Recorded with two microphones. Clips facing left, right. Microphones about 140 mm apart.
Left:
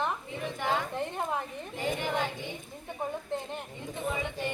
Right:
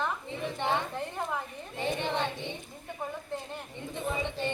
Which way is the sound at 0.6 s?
20° right (ahead or behind).